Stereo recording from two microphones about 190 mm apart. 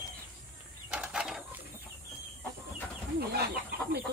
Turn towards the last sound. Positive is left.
turn(degrees=-55)  # may be behind; listen again after turning